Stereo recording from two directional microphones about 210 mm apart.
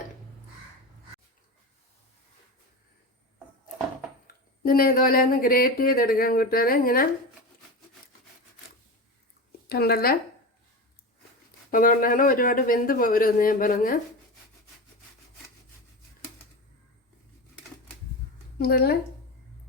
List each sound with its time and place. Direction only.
4.3 s speech: 45° left (ahead or behind)
9.6 s speech: 50° left (ahead or behind)
11.7 s speech: 40° left (ahead or behind)
18.5 s a woman's voice: 50° left (ahead or behind)